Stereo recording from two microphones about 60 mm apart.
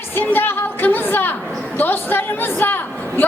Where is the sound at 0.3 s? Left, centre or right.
Left.